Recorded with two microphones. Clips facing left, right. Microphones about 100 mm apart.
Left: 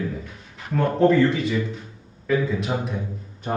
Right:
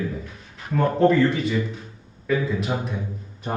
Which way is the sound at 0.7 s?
Centre (ahead or behind).